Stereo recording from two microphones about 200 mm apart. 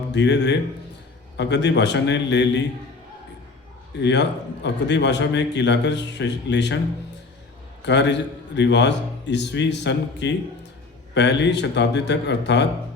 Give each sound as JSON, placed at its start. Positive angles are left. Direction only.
{"t": 0.1, "sound": "a man's voice", "side_deg": 60}
{"t": 3.9, "sound": "a man's voice", "side_deg": 60}
{"t": 7.9, "sound": "a man's voice", "side_deg": 60}